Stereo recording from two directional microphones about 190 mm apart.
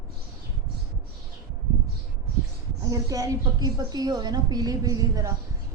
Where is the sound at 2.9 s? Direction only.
20° right (ahead or behind).